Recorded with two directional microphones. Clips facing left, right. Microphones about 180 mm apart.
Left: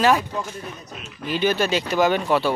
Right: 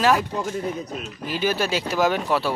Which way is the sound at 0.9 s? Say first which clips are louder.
Right 4 dB; 45° right (ahead or behind).